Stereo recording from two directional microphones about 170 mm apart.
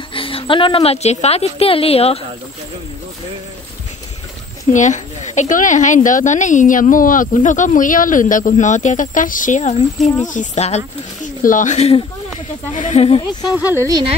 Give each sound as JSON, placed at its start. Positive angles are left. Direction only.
{"t": 0.1, "sound": "a woman's voice", "side_deg": 35}
{"t": 4.7, "sound": "speech", "side_deg": 45}
{"t": 13.7, "sound": "speech", "side_deg": -20}